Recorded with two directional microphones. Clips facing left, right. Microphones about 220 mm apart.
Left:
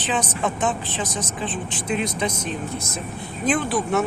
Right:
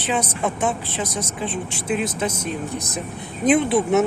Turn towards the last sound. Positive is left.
turn(degrees=-25)  # may be behind; listen again after turning